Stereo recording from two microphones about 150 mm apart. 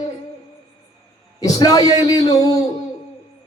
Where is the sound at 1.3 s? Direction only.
25° left (ahead or behind).